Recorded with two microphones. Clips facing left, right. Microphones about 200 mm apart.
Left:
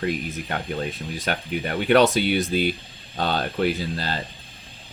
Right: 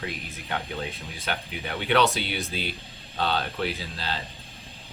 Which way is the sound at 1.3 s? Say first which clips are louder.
Left 5 dB; 50° left (ahead or behind).